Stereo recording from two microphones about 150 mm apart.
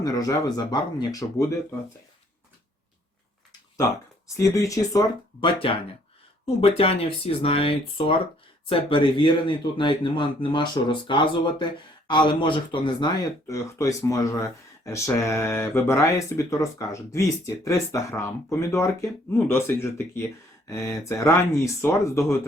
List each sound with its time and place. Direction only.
0.0 s speech: 25° left (ahead or behind)
4.4 s speech: 20° left (ahead or behind)
6.4 s a man's voice: 40° left (ahead or behind)
13.5 s speech: 20° left (ahead or behind)